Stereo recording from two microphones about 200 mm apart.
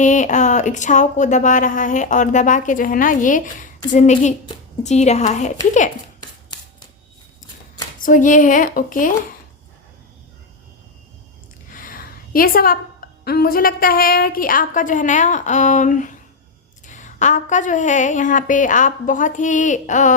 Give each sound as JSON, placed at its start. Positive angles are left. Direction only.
{"t": 0.0, "sound": "speech", "side_deg": 40}
{"t": 6.1, "sound": "chopping", "side_deg": 20}
{"t": 7.9, "sound": "speech", "side_deg": 40}
{"t": 11.7, "sound": "a woman's voice", "side_deg": 45}